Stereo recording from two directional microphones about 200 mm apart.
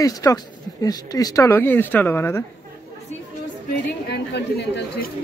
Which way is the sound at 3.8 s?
55° left (ahead or behind).